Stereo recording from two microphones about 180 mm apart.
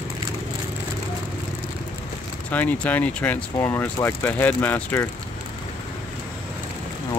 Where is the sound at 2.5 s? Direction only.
10° left (ahead or behind).